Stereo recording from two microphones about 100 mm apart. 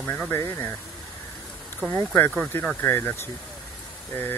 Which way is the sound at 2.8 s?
20° left (ahead or behind).